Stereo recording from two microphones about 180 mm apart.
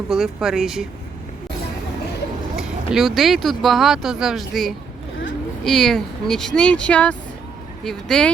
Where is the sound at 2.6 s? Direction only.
Centre (ahead or behind).